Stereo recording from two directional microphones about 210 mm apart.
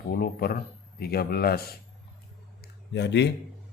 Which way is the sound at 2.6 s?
55° left (ahead or behind).